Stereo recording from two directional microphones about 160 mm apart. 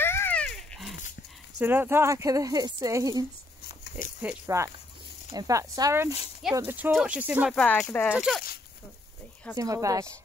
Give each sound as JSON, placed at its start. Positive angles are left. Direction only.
{"t": 0.0, "sound": "dog", "side_deg": 15}
{"t": 0.7, "sound": "dog", "side_deg": 0}
{"t": 1.6, "sound": "speech", "side_deg": -10}
{"t": 7.5, "sound": "speech", "side_deg": 5}
{"t": 8.1, "sound": "speech", "side_deg": -5}
{"t": 9.6, "sound": "speech", "side_deg": -20}